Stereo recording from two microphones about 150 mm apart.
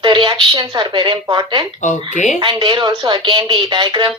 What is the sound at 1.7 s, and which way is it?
Speech, 55° left (ahead or behind).